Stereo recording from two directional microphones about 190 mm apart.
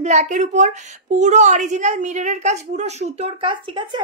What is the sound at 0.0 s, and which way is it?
A woman's voice, 40° right (ahead or behind).